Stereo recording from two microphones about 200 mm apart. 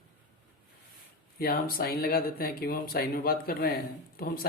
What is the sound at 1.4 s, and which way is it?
Speech, 50° left (ahead or behind).